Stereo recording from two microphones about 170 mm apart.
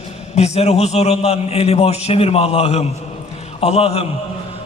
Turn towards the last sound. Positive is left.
turn(degrees=35)  # may be behind; listen again after turning